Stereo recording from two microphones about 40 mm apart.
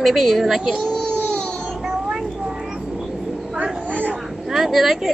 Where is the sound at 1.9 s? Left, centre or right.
Centre.